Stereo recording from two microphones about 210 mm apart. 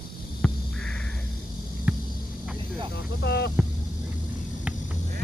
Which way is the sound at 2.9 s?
55° left (ahead or behind).